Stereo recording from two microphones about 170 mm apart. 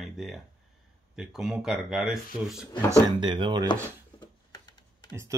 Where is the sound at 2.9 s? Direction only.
25° right (ahead or behind).